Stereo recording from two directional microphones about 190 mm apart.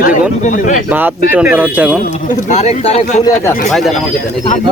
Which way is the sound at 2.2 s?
40° left (ahead or behind).